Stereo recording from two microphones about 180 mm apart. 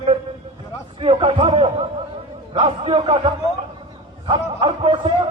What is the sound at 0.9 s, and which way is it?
A man's voice, 30° right (ahead or behind).